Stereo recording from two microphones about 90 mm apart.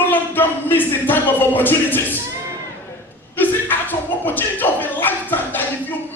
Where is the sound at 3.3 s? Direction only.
20° left (ahead or behind).